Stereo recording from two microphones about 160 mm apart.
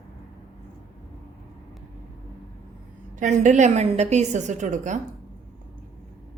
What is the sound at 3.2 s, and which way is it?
A woman's voice, 50° right (ahead or behind).